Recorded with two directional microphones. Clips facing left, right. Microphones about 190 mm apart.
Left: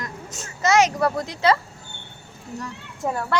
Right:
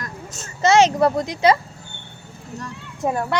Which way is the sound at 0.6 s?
25° right (ahead or behind).